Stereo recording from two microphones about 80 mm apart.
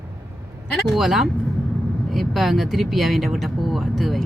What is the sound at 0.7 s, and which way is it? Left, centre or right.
Speech, centre.